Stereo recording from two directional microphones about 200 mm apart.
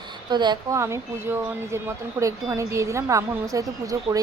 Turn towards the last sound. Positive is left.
turn(degrees=-15)  # may be behind; listen again after turning